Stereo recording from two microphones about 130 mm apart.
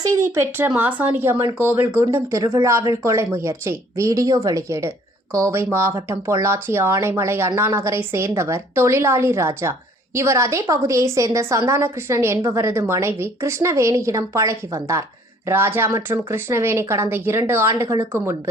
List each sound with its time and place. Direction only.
0.0 s a woman's voice: 25° right (ahead or behind)